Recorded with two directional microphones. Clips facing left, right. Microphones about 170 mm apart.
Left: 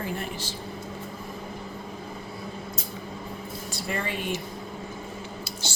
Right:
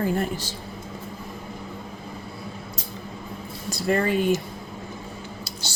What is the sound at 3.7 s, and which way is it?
Speech, 40° right (ahead or behind).